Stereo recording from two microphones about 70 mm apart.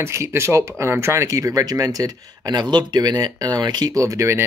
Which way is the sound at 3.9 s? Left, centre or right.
Right.